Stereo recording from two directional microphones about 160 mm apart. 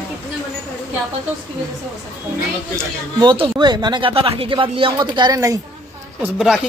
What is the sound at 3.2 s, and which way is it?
Speech, 30° right (ahead or behind).